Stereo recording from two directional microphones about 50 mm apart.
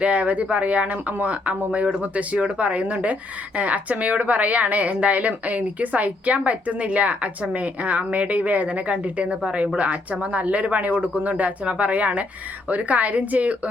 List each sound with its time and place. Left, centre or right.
0.0 s speech: right